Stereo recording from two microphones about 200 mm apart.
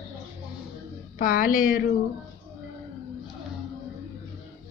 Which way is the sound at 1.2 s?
45° left (ahead or behind).